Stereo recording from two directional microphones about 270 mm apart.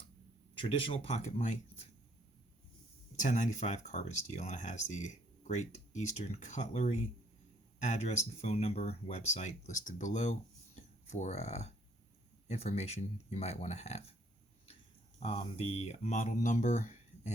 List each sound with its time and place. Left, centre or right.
0.5 s speech: centre
3.2 s speech: left
15.2 s speech: left